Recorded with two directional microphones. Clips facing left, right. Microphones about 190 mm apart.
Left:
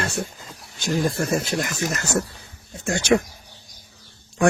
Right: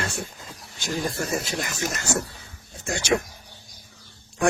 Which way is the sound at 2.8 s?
55° left (ahead or behind).